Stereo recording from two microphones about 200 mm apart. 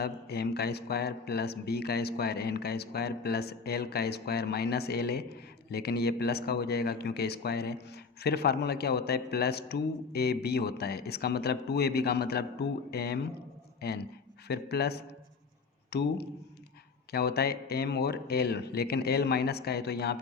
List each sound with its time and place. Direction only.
0.0 s a man's voice: 55° left (ahead or behind)